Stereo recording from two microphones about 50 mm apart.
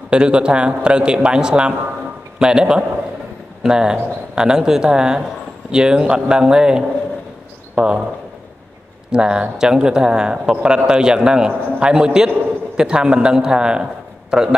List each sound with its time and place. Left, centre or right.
0.1 s speech: right
9.1 s speech: centre